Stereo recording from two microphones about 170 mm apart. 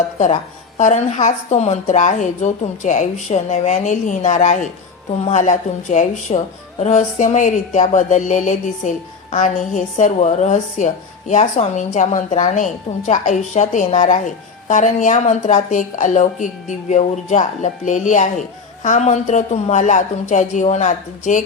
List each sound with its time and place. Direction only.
0.8 s a woman's voice: 45° left (ahead or behind)